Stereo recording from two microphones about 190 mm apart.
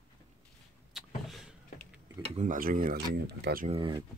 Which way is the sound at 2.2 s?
40° right (ahead or behind).